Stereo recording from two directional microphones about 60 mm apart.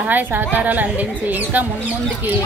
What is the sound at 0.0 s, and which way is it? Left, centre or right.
A woman's voice, right.